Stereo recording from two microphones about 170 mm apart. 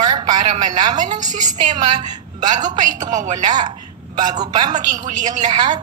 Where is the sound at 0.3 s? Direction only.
25° right (ahead or behind).